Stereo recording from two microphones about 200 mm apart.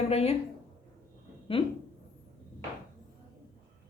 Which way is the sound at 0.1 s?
30° left (ahead or behind).